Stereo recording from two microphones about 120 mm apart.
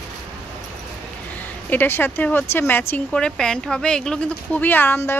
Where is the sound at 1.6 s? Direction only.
15° left (ahead or behind).